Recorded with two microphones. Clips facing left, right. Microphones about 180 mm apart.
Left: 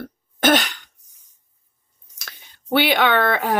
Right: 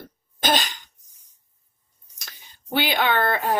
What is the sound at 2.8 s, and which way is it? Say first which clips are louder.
Speech: left 4 dB; 75° left (ahead or behind).